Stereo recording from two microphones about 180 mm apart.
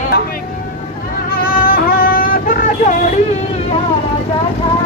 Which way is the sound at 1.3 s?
55° left (ahead or behind).